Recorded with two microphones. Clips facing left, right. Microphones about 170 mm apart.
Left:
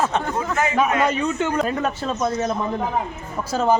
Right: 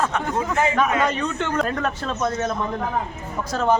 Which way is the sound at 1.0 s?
10° left (ahead or behind).